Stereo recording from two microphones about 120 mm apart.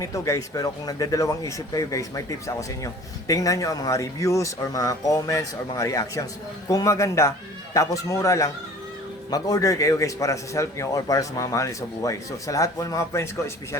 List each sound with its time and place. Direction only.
0.0 s speech: 25° left (ahead or behind)